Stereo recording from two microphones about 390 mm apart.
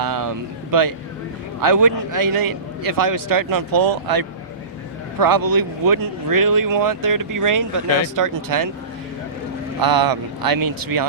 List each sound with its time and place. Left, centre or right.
0.0 s speech: right
9.8 s speech: right